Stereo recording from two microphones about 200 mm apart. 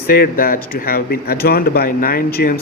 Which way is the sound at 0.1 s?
50° left (ahead or behind).